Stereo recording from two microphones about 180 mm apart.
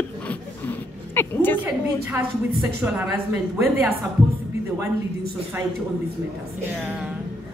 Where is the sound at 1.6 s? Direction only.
10° right (ahead or behind).